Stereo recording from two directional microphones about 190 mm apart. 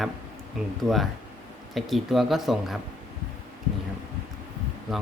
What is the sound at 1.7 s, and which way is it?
Speech, centre (ahead or behind).